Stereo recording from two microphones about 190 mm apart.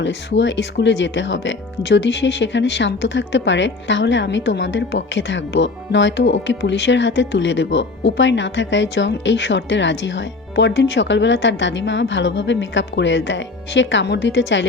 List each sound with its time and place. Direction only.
0.0 s speech: 70° left (ahead or behind)